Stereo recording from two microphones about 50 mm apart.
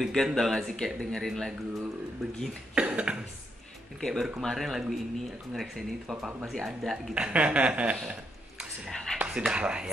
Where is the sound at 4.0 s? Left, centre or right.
Centre.